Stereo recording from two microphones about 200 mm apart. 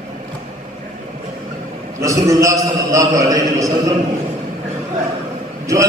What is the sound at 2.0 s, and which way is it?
A man's voice, 15° right (ahead or behind).